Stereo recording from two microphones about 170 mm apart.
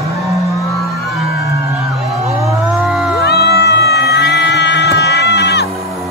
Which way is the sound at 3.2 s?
75° left (ahead or behind).